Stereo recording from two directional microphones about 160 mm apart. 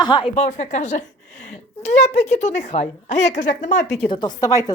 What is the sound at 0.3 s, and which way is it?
A woman's voice, 45° left (ahead or behind).